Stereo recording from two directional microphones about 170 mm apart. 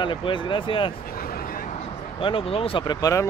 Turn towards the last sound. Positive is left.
turn(degrees=20)  # may be behind; listen again after turning